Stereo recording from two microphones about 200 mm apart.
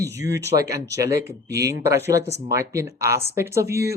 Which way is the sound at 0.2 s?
15° right (ahead or behind).